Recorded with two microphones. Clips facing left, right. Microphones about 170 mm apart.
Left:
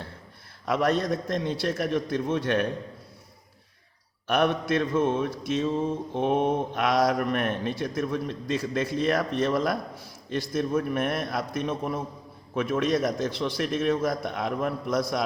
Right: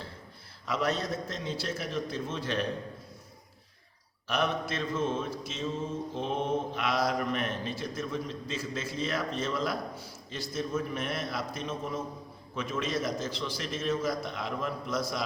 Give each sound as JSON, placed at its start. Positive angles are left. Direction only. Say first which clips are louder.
{"t": 0.6, "sound": "mantra", "louder": "left 6 dB", "side_deg": 55}
{"t": 4.3, "sound": "mantra", "louder": "left 7 dB", "side_deg": 60}